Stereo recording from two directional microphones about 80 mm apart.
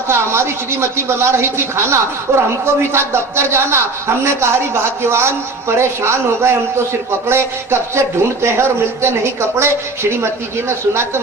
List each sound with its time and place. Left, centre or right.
0.1 s a woman's voice: right